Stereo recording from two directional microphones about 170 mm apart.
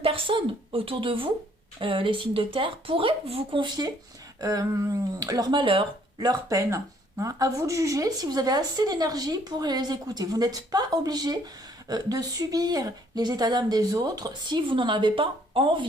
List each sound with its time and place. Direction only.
0.0 s speech: 30° right (ahead or behind)